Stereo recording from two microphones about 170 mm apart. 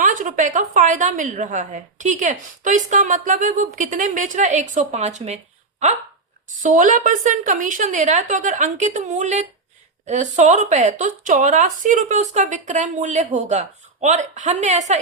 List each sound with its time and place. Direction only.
0.0 s a woman's voice: 50° right (ahead or behind)
6.6 s a woman's voice: 50° right (ahead or behind)